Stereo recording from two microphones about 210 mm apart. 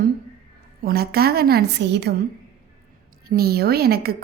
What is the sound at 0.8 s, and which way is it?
A woman's voice, 45° right (ahead or behind).